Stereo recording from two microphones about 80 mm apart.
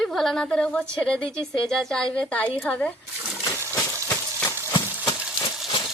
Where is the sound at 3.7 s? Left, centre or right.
Left.